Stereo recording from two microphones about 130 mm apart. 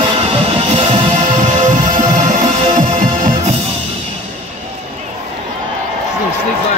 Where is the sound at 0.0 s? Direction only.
50° right (ahead or behind); by 3.5 s 90° right.